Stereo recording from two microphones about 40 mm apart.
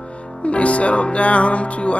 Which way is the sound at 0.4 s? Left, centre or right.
Left.